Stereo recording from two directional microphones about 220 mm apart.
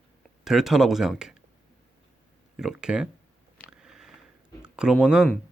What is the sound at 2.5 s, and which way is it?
Speech, 5° right (ahead or behind).